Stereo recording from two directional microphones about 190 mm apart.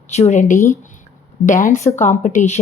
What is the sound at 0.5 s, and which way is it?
Speech, 15° left (ahead or behind).